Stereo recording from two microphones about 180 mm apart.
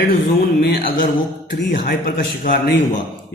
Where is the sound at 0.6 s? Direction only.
55° left (ahead or behind).